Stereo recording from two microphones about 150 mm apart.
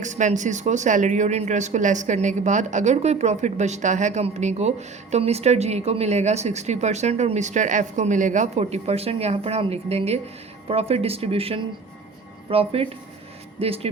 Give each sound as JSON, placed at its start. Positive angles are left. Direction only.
{"t": 0.0, "sound": "speech", "side_deg": -55}